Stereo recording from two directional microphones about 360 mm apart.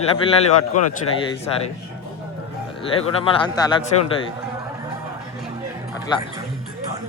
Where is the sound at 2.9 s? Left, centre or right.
Centre.